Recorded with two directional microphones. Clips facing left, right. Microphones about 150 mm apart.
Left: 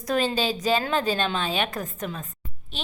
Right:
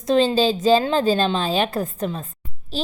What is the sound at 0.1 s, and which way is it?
A woman's voice, 25° right (ahead or behind).